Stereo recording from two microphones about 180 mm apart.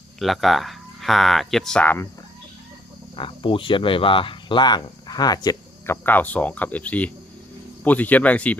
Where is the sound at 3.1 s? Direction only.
30° left (ahead or behind).